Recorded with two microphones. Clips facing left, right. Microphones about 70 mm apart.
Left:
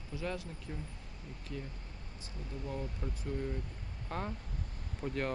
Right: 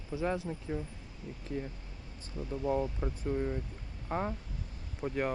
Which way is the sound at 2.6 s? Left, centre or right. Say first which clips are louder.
Right 10 dB; right.